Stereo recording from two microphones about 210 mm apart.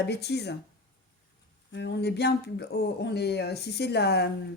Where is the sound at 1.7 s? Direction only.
55° left (ahead or behind).